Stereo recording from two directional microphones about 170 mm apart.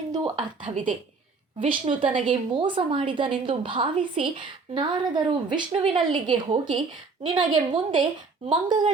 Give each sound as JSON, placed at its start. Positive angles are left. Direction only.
{"t": 0.3, "sound": "speech", "side_deg": -45}
{"t": 1.5, "sound": "a woman's voice", "side_deg": -30}